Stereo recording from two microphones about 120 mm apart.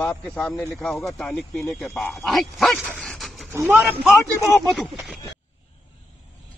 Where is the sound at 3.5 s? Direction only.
20° right (ahead or behind).